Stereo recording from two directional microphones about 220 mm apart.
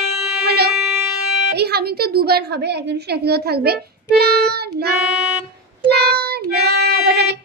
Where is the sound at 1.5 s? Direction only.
45° right (ahead or behind).